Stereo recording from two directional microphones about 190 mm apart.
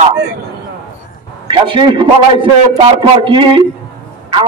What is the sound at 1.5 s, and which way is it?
A man's voice, 25° right (ahead or behind).